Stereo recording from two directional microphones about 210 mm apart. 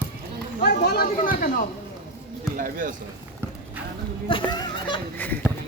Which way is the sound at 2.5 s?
40° right (ahead or behind).